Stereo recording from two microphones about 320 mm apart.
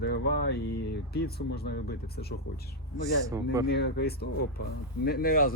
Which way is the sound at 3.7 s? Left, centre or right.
Left.